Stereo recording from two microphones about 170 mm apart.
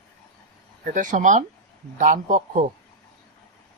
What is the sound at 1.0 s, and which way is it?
Speech, 50° right (ahead or behind).